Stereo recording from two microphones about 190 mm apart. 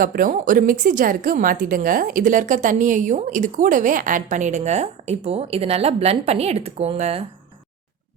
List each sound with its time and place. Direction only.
0.0 s a woman's voice: 45° right (ahead or behind)